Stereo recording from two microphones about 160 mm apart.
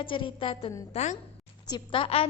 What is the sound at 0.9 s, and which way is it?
Speech, 45° left (ahead or behind).